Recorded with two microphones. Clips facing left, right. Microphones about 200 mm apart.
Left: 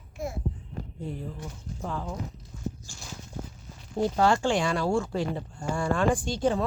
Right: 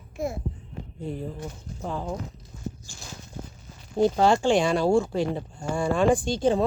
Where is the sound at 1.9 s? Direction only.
20° right (ahead or behind).